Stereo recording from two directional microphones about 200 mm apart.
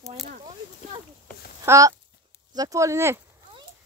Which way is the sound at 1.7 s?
15° right (ahead or behind).